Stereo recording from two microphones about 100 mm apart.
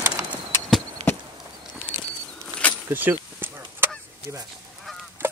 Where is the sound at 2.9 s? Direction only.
20° right (ahead or behind).